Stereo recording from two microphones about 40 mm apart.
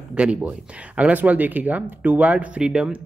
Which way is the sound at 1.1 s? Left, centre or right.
Right.